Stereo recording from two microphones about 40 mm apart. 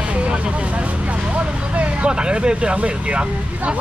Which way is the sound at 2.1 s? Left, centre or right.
Right.